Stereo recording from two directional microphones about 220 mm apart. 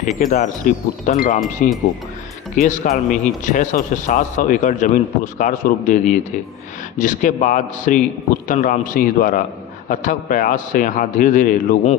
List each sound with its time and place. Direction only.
0.2 s a man's voice: 35° left (ahead or behind)